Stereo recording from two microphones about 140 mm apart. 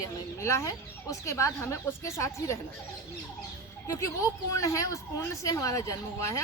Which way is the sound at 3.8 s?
20° left (ahead or behind).